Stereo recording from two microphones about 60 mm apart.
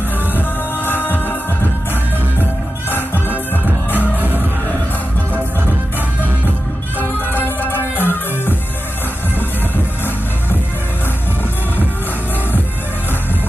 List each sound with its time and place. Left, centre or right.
0.4 s music: left
3.9 s music: right
7.0 s music: left